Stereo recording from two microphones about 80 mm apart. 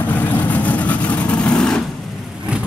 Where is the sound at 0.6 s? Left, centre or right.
Centre.